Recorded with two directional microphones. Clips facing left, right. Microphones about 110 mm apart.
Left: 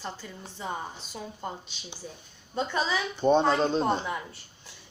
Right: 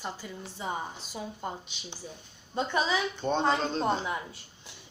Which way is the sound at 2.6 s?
15° right (ahead or behind).